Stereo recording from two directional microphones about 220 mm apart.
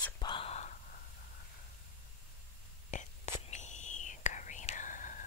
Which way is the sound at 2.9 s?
35° left (ahead or behind).